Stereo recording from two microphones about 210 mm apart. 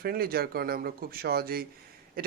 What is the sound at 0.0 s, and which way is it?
A man's voice, 45° right (ahead or behind).